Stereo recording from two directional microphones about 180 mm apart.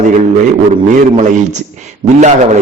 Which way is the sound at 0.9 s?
40° right (ahead or behind).